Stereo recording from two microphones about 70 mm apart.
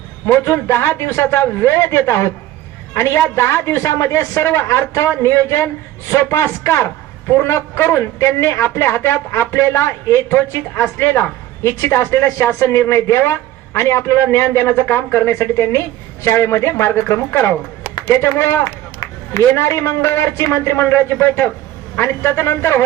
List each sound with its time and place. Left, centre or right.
0.3 s a man's voice: left
18.6 s a man's voice: left